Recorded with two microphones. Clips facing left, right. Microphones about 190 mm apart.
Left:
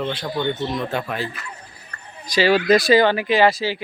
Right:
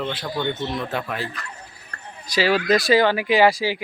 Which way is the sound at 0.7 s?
Centre (ahead or behind).